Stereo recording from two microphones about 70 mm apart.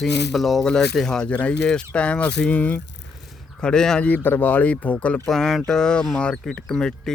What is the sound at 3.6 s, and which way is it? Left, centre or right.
Speech, centre.